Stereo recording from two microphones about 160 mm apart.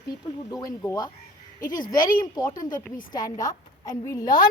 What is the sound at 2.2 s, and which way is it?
A woman's voice, 25° left (ahead or behind).